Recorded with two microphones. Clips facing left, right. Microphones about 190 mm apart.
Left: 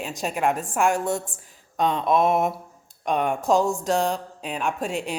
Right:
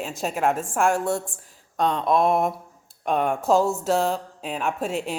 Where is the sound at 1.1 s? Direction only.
20° left (ahead or behind).